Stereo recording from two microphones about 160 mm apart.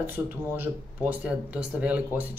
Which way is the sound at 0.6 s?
10° right (ahead or behind).